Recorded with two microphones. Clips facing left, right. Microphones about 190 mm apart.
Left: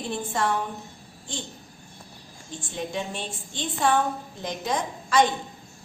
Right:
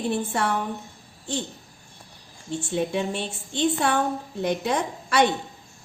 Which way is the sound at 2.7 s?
60° right (ahead or behind).